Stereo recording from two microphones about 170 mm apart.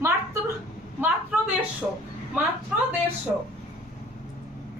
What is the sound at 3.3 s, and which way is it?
Speech, 5° right (ahead or behind).